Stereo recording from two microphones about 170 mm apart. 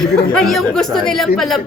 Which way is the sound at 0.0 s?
5° left (ahead or behind).